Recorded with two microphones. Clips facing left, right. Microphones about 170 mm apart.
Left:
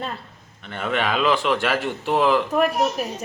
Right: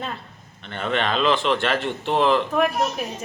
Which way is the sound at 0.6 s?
10° left (ahead or behind).